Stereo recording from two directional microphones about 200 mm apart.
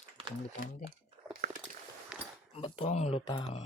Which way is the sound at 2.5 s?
30° left (ahead or behind).